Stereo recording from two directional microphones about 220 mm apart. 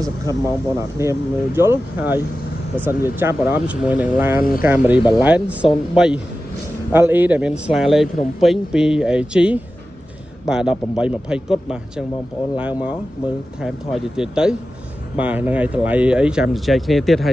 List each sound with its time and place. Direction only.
0.0 s speech: 15° right (ahead or behind)
4.4 s speech: 40° left (ahead or behind)
4.6 s speech: 5° right (ahead or behind)